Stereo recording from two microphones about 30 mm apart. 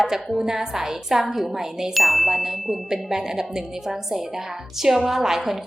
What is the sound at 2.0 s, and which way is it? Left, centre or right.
Ding, centre.